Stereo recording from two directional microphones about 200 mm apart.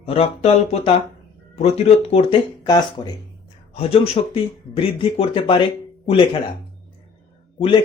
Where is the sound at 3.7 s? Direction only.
30° left (ahead or behind).